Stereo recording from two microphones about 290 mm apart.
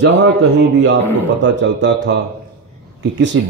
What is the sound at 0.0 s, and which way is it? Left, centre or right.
Speech, right.